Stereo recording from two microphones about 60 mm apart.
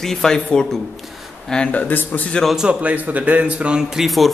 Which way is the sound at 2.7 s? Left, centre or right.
Right.